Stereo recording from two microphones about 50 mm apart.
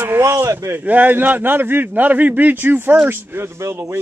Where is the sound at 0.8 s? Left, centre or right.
Right.